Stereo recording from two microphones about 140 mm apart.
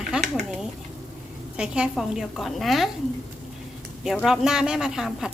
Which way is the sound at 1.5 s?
5° right (ahead or behind).